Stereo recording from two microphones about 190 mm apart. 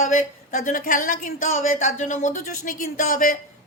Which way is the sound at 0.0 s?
45° left (ahead or behind).